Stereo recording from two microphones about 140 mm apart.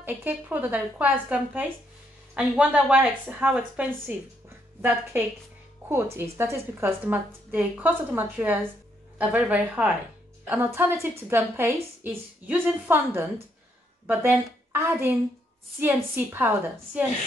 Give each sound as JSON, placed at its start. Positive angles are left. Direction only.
{"t": 0.0, "sound": "a woman's voice", "side_deg": -15}
{"t": 6.1, "sound": "a woman's voice", "side_deg": -20}